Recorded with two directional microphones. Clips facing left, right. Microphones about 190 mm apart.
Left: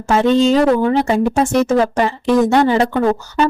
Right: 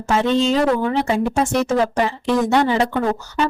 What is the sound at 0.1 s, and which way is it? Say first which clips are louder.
Speech: left 5 dB; 45° left (ahead or behind).